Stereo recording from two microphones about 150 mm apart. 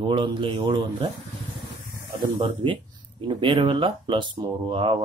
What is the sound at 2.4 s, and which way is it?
Speech, 35° right (ahead or behind).